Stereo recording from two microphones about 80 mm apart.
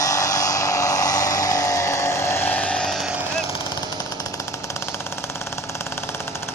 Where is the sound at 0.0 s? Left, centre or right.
Left; by 3.0 s centre.